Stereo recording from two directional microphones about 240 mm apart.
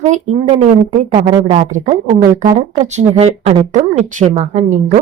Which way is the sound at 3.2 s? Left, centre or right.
Right.